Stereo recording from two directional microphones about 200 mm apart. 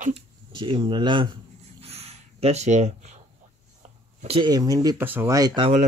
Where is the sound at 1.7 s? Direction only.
30° right (ahead or behind).